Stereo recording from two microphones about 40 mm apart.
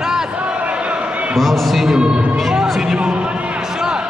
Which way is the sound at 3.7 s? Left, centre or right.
Centre.